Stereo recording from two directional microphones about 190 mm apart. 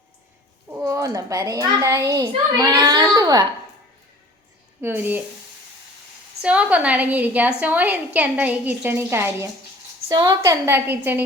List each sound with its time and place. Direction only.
0.7 s a child's voice: 15° right (ahead or behind)
4.8 s a woman's voice: 10° right (ahead or behind)
6.4 s a woman's voice: 5° right (ahead or behind)